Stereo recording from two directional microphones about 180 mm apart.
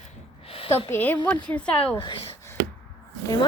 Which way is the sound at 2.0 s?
30° left (ahead or behind).